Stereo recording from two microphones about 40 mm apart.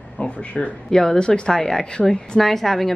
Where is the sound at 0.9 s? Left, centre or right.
Centre.